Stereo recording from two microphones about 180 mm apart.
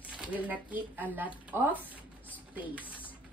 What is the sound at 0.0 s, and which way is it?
Speech, 10° right (ahead or behind).